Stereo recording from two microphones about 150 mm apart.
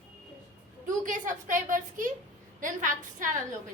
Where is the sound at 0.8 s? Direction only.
60° right (ahead or behind).